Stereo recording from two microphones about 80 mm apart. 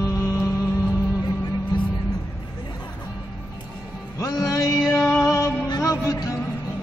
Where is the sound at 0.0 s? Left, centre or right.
Left.